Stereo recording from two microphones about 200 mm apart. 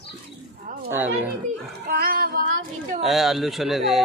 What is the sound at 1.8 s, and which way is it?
Child singing, 50° right (ahead or behind).